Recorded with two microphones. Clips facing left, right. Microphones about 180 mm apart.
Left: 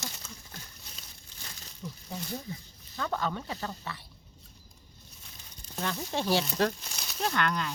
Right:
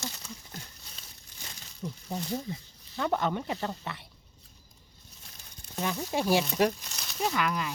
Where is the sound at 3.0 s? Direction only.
20° right (ahead or behind).